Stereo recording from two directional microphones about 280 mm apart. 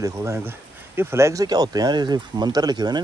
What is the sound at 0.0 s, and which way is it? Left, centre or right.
Speech, centre.